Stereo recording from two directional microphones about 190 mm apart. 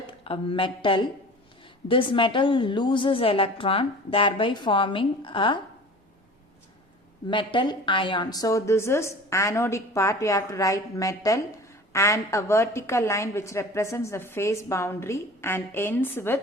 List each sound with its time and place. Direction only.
0.3 s a woman's voice: 30° left (ahead or behind)
7.3 s a woman's voice: 25° left (ahead or behind)